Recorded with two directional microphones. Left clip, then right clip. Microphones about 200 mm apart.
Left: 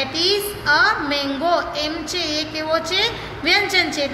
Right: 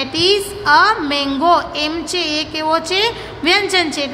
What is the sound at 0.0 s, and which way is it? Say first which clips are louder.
A woman's voice: right 4 dB; 50° right (ahead or behind).